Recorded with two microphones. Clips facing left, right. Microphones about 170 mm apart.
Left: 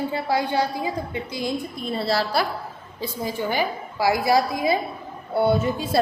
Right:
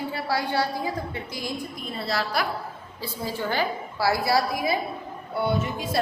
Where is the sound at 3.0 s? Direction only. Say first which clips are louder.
Left 3 dB; 15° left (ahead or behind).